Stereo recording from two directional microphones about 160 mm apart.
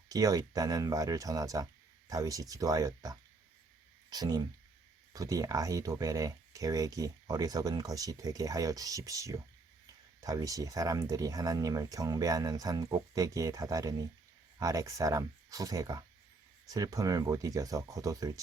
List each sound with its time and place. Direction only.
0.1 s speech: 25° right (ahead or behind)